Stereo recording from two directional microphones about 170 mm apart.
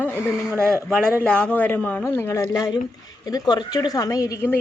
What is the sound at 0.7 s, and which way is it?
A woman's voice, centre (ahead or behind).